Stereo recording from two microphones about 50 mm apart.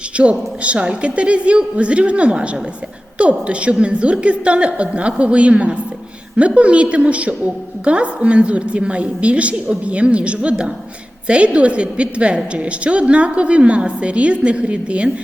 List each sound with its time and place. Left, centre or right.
0.2 s a woman's voice: right